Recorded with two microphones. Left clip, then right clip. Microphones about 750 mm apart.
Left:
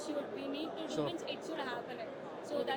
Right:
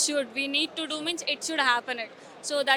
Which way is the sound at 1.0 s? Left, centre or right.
Right.